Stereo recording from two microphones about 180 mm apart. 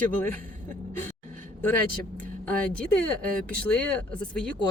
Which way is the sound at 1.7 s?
10° left (ahead or behind).